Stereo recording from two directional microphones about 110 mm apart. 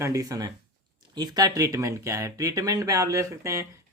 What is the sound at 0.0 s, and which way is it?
Speech, 30° right (ahead or behind).